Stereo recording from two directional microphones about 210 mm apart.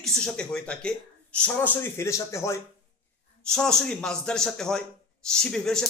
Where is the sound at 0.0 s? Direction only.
Centre (ahead or behind).